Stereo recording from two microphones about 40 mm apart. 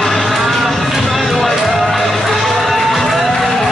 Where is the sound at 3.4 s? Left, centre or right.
Centre.